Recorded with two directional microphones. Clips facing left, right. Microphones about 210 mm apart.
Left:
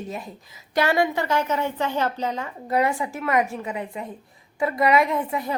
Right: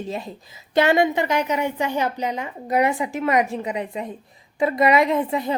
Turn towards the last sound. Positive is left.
turn(degrees=-25)  # may be behind; listen again after turning